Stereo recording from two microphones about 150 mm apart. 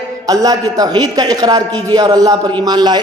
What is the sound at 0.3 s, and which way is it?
A man's voice, 25° right (ahead or behind).